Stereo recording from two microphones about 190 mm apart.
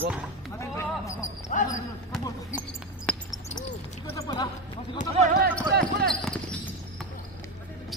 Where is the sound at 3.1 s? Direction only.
5° left (ahead or behind).